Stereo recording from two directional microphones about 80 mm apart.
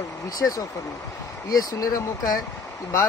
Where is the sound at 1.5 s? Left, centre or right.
Left.